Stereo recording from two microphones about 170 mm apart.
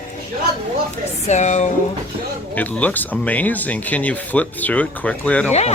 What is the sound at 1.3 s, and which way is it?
Speech, 45° left (ahead or behind).